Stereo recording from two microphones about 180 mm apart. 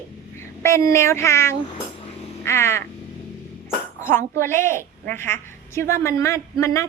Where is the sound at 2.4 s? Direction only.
15° left (ahead or behind).